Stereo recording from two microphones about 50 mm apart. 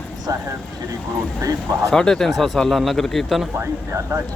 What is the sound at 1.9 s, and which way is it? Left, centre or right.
Speech, centre.